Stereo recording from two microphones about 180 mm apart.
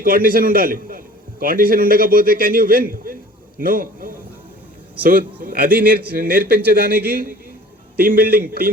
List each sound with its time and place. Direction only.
0.0 s a man's voice: 50° right (ahead or behind)
8.6 s speech: 10° right (ahead or behind)